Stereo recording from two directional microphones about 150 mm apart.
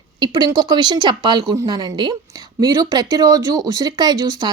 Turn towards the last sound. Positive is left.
turn(degrees=-30)  # may be behind; listen again after turning